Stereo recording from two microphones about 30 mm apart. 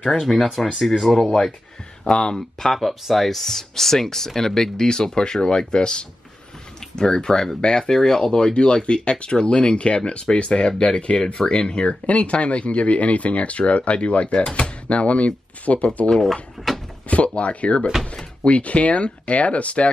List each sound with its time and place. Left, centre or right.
0.3 s speech: left
0.7 s speech: centre
2.0 s speech: left
2.9 s speech: centre
3.3 s speech: centre; by 12.0 s left
12.1 s speech: left
16.2 s speech: centre
17.1 s a sound: left
17.4 s speech: left